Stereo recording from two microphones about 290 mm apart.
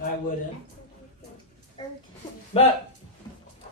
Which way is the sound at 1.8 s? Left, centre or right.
Centre.